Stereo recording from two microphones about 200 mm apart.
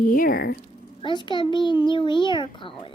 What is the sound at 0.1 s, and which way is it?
Speech, 45° left (ahead or behind).